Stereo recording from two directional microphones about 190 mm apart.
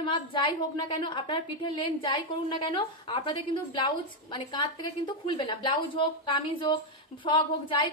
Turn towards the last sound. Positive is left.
turn(degrees=25)  # may be behind; listen again after turning